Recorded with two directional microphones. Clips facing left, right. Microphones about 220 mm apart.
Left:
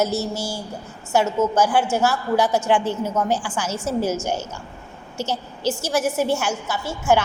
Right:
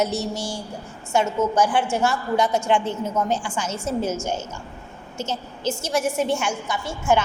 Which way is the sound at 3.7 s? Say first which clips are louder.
Left 2 dB; 25° right (ahead or behind).